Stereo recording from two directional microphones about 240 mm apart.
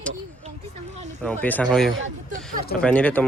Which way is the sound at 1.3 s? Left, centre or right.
Centre.